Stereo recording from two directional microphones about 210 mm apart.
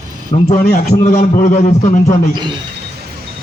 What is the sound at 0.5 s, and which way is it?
Speech, 45° left (ahead or behind).